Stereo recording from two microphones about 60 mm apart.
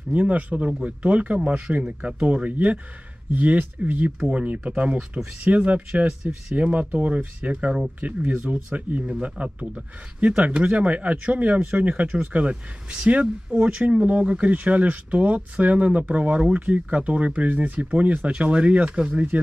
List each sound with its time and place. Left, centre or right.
0.1 s speech: right